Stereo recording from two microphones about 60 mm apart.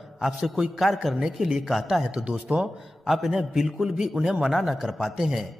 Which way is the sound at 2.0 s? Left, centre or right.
Centre.